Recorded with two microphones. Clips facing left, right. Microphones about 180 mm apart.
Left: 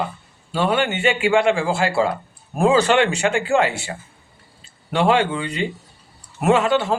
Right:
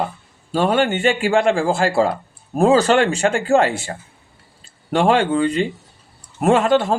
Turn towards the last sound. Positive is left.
turn(degrees=-45)  # may be behind; listen again after turning